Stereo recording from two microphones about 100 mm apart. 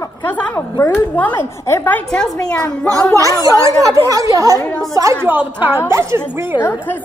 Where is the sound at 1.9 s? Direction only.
10° left (ahead or behind).